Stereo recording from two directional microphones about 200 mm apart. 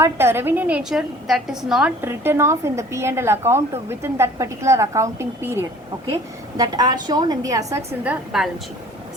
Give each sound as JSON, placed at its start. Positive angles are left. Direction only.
{"t": 0.0, "sound": "a woman's voice", "side_deg": -10}